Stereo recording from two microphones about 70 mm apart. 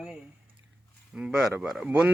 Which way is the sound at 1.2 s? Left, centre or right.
Centre.